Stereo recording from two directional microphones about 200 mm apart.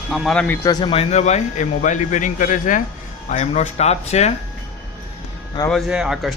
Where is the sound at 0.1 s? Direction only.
Centre (ahead or behind); by 4.4 s 35° left (ahead or behind).